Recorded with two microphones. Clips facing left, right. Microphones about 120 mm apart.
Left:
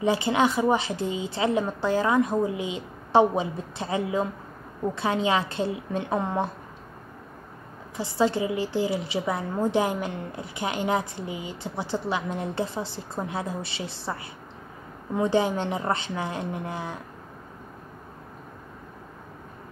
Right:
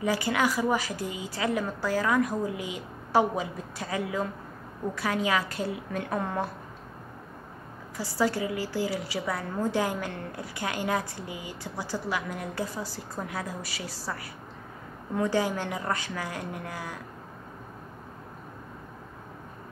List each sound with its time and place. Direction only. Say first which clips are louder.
0.0 s a woman's voice: left 4 dB; 25° left (ahead or behind)
8.0 s a woman's voice: left 3 dB; 20° left (ahead or behind)